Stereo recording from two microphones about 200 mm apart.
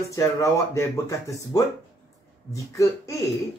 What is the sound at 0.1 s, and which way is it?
Speech, 15° left (ahead or behind).